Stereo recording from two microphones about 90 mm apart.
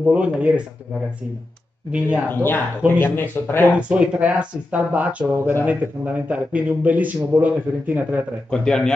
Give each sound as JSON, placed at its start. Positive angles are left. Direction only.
{"t": 0.0, "sound": "speech", "side_deg": -15}
{"t": 1.9, "sound": "speech", "side_deg": -15}
{"t": 2.2, "sound": "speech", "side_deg": 25}
{"t": 3.7, "sound": "speech", "side_deg": -15}
{"t": 8.5, "sound": "a man's voice", "side_deg": 10}